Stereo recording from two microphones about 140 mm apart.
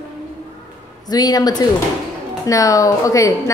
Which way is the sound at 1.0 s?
30° left (ahead or behind).